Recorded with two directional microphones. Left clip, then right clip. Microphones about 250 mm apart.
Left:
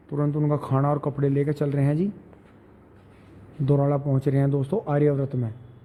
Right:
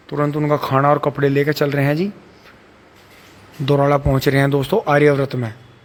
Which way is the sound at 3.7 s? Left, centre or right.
Centre.